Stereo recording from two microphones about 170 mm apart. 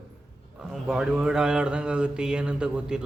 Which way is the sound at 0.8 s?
5° right (ahead or behind).